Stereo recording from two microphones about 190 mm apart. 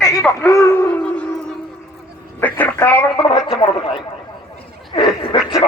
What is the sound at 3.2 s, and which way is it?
Speech, 25° left (ahead or behind).